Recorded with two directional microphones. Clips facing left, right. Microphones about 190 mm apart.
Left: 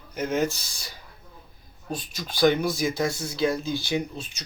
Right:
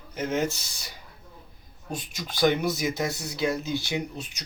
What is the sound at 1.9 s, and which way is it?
Speech, 20° right (ahead or behind).